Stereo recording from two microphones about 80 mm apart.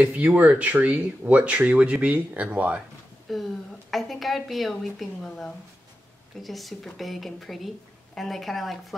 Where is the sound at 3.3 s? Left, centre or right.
Centre.